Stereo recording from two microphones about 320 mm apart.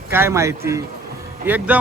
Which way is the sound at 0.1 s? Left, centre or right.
Centre.